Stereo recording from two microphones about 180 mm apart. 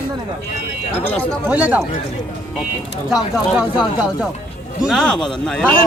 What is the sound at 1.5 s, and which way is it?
Speech, 10° right (ahead or behind).